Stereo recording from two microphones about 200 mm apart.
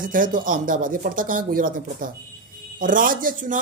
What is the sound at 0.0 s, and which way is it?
Speech, 45° right (ahead or behind).